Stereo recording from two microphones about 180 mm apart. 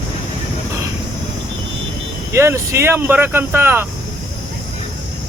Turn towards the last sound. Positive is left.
turn(degrees=-10)  # may be behind; listen again after turning